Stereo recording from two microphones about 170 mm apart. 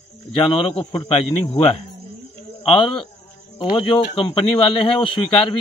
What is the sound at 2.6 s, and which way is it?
Speech, 30° left (ahead or behind).